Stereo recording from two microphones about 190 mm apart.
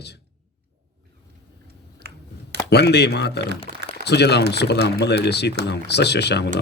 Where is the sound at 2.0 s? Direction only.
55° right (ahead or behind).